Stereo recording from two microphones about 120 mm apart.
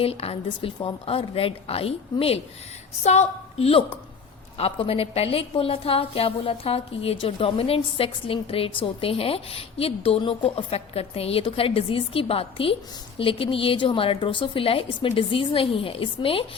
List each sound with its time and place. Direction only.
0.0 s a woman's voice: 55° left (ahead or behind)
3.0 s a woman's voice: 65° left (ahead or behind); by 16.5 s 50° left (ahead or behind)